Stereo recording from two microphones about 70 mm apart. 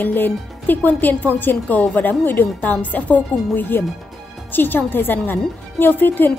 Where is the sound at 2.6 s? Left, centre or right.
Left.